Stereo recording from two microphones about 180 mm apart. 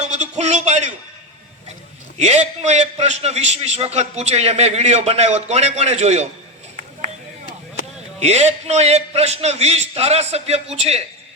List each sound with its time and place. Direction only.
0.0 s a sound: 40° right (ahead or behind)
2.1 s a man's voice: 40° right (ahead or behind)
8.2 s a man's voice: 35° right (ahead or behind)